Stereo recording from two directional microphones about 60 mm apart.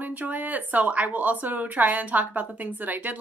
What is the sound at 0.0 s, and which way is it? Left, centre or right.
A woman's voice, right.